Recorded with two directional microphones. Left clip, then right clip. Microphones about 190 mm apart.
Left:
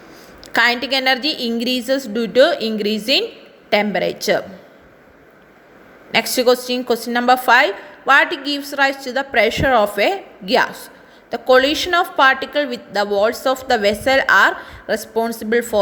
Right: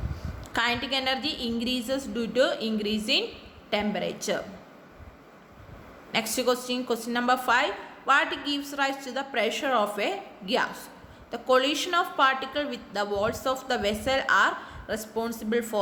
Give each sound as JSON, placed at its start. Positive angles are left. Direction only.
{"t": 0.5, "sound": "a woman's voice", "side_deg": 30}
{"t": 6.1, "sound": "a woman's voice", "side_deg": 30}